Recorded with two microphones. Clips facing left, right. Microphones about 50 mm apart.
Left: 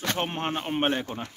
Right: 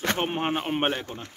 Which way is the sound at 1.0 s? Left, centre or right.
Centre.